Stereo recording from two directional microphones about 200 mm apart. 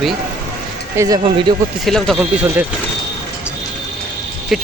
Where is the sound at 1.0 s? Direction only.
20° right (ahead or behind).